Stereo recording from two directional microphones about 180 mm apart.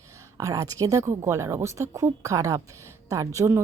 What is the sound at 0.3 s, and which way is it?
A woman's voice, 20° right (ahead or behind).